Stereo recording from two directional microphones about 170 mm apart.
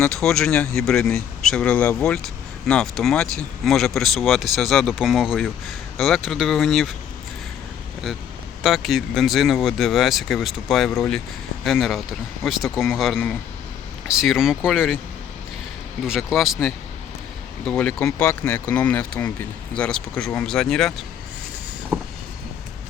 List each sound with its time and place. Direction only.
0.0 s speech: centre (ahead or behind)
8.6 s speech: centre (ahead or behind)
14.2 s speech: centre (ahead or behind)
16.0 s speech: centre (ahead or behind)